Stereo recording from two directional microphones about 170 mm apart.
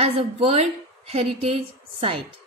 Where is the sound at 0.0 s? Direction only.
35° right (ahead or behind).